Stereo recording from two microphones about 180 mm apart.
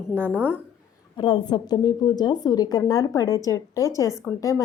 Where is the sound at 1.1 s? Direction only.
25° left (ahead or behind).